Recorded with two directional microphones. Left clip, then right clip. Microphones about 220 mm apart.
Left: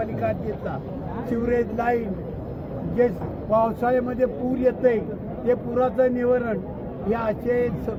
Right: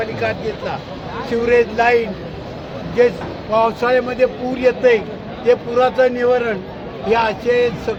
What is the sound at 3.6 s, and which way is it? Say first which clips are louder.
Speech: right 9 dB; 10° right (ahead or behind).